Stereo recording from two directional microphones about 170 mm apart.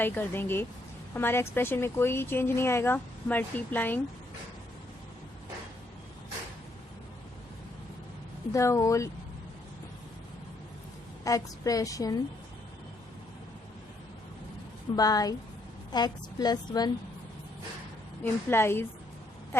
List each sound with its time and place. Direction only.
0.0 s speech: 10° left (ahead or behind)
8.5 s speech: 15° left (ahead or behind)
11.2 s a woman's voice: 20° left (ahead or behind)
14.9 s a woman's voice: 20° left (ahead or behind)
18.2 s speech: 15° left (ahead or behind)